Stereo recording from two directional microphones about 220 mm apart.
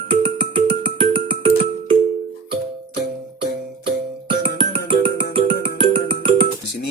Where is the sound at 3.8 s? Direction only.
25° right (ahead or behind).